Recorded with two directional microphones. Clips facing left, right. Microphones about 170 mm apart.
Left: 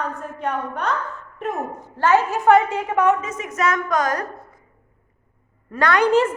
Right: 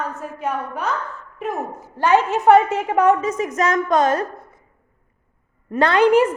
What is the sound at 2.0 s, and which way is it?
A woman's voice, 20° right (ahead or behind).